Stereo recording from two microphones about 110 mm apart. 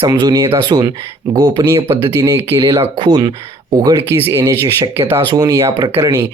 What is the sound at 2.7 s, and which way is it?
Speech, 45° right (ahead or behind).